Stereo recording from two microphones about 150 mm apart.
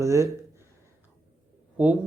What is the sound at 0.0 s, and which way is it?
Speech, 20° right (ahead or behind).